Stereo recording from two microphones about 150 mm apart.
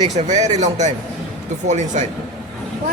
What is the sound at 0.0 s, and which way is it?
Speech, 50° right (ahead or behind).